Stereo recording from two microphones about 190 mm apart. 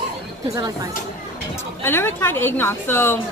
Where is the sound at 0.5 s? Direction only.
20° right (ahead or behind).